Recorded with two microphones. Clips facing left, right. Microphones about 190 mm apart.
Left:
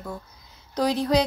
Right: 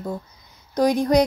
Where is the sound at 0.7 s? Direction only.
15° right (ahead or behind).